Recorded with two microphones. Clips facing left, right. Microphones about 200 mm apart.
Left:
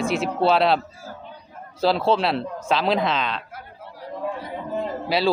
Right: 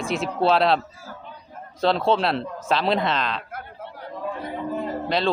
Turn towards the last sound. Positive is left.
turn(degrees=5)  # may be behind; listen again after turning